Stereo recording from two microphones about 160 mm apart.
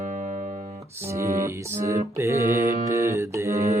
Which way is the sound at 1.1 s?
20° right (ahead or behind).